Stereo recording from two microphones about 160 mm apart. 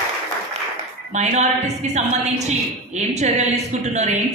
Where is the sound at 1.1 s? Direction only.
45° right (ahead or behind).